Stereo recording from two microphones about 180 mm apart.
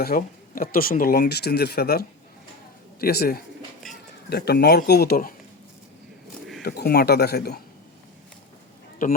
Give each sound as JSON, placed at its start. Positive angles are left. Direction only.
{"t": 0.0, "sound": "speech", "side_deg": 55}
{"t": 6.6, "sound": "speech", "side_deg": 60}
{"t": 9.0, "sound": "a man's voice", "side_deg": 50}